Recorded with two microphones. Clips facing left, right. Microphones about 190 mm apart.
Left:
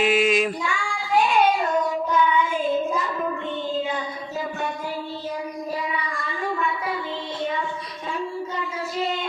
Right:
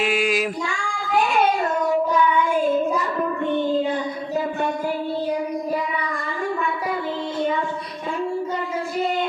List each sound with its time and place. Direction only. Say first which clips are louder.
0.1 s child singing: left 2 dB; centre (ahead or behind)
3.2 s child singing: right 5 dB; 55° right (ahead or behind)